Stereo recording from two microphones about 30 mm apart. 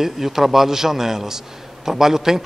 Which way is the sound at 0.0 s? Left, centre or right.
Centre.